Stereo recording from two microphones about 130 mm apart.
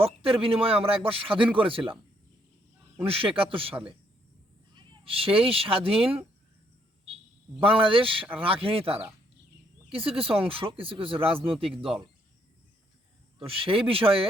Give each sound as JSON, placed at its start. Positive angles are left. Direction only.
{"t": 0.0, "sound": "a sound", "side_deg": -45}
{"t": 0.4, "sound": "speech", "side_deg": -45}
{"t": 3.1, "sound": "speech", "side_deg": -45}
{"t": 7.6, "sound": "speech", "side_deg": -45}
{"t": 9.9, "sound": "speech", "side_deg": -45}
{"t": 13.4, "sound": "speech", "side_deg": -45}